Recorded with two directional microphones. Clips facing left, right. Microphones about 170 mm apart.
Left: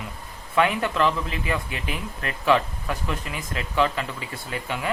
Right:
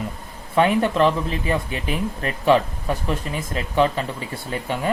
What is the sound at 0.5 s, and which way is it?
Speech, 30° right (ahead or behind).